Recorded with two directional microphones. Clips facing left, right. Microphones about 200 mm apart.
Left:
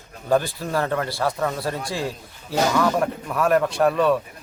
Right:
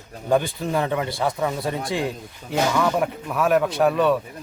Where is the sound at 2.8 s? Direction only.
5° right (ahead or behind).